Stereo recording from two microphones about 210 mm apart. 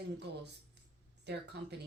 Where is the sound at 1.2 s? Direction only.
50° right (ahead or behind).